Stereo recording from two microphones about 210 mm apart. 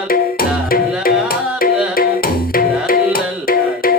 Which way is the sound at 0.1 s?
45° left (ahead or behind).